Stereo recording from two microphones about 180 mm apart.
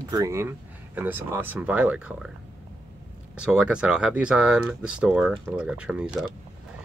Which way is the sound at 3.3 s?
5° right (ahead or behind).